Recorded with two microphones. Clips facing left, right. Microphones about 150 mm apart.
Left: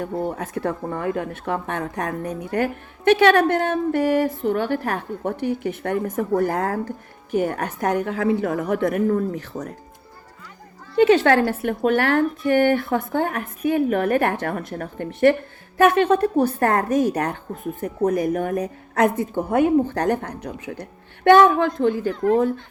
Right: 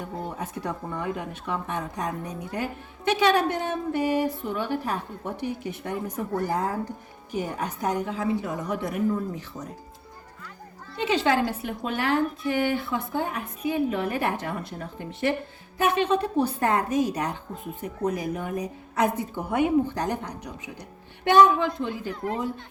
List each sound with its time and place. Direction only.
0.0 s speech: 65° left (ahead or behind)
10.9 s speech: 60° left (ahead or behind)